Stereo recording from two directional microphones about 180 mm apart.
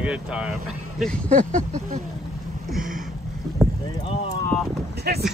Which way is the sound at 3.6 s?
Centre (ahead or behind).